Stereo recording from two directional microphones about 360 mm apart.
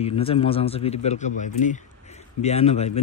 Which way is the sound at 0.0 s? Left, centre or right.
Centre.